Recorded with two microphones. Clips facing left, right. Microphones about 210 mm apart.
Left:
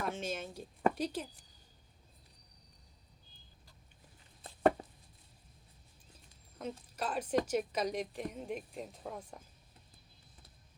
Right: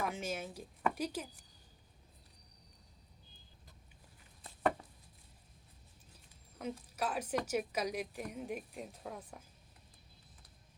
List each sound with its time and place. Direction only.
0.0 s speech: 10° right (ahead or behind)
4.4 s chopping: 35° left (ahead or behind)
6.6 s a woman's voice: 10° right (ahead or behind)